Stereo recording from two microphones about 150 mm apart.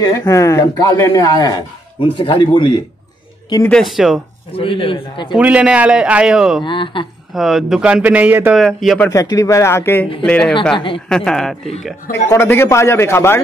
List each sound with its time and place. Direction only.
0.0 s speech: 25° left (ahead or behind)
3.6 s speech: centre (ahead or behind)
4.5 s a man's voice: 35° left (ahead or behind)
5.3 s speech: 10° right (ahead or behind)
6.6 s a man's voice: 35° left (ahead or behind)
7.3 s speech: centre (ahead or behind)
8.5 s speech: centre (ahead or behind)
9.1 s a man's voice: 20° left (ahead or behind); by 11.7 s 5° left (ahead or behind)
12.1 s a man's voice: 15° left (ahead or behind)